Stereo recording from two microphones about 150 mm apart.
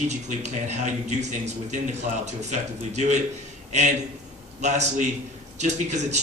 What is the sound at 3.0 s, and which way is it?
Speech, 50° right (ahead or behind).